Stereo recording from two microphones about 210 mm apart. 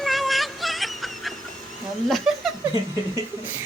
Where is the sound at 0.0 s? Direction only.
Centre (ahead or behind).